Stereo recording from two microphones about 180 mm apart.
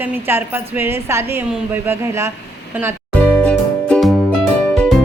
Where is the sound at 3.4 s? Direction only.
5° left (ahead or behind).